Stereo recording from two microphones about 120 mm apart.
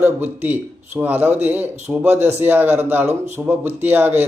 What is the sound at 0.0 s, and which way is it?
Speech, 15° right (ahead or behind).